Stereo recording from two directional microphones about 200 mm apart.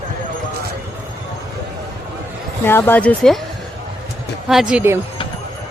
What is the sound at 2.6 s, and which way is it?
Speech, 10° left (ahead or behind).